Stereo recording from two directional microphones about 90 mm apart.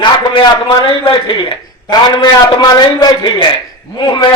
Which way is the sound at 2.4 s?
45° left (ahead or behind).